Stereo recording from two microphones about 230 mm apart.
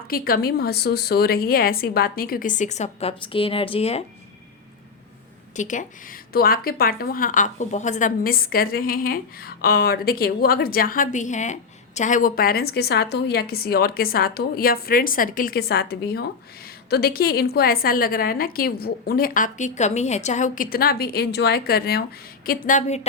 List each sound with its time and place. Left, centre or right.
0.1 s speech: left
5.5 s speech: left